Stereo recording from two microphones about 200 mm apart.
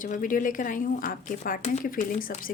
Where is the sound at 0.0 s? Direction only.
40° left (ahead or behind).